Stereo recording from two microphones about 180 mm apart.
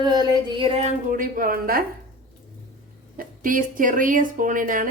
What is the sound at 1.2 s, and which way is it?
Speech, 50° right (ahead or behind).